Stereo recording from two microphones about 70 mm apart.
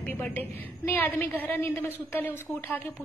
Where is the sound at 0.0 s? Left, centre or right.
Left.